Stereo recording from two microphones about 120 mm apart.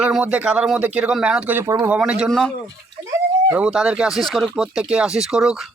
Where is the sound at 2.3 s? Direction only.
5° left (ahead or behind).